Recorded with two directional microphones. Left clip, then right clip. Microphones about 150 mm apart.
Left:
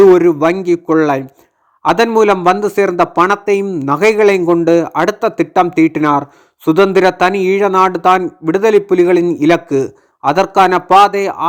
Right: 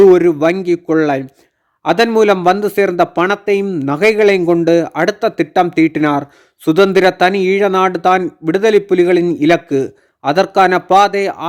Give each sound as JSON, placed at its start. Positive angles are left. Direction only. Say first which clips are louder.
{"t": 0.0, "sound": "a man's voice", "louder": "left 1 dB", "side_deg": -25}